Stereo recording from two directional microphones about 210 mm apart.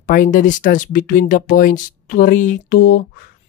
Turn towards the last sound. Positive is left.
turn(degrees=50)  # may be behind; listen again after turning